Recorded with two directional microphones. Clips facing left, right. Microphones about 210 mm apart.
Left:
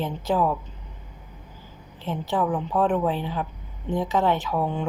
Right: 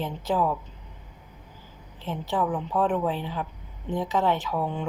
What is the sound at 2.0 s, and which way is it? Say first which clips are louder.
A woman's voice: left 2 dB; 45° left (ahead or behind).